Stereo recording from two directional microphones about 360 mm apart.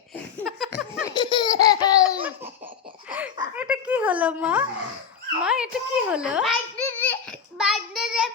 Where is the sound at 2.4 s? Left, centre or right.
Centre.